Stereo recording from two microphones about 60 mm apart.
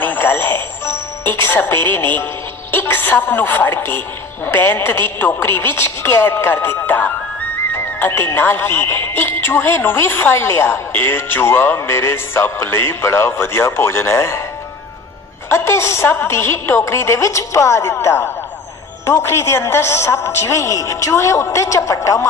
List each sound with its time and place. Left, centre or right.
0.0 s music: left
2.7 s speech: left
6.1 s speech: left
15.4 s a woman's voice: left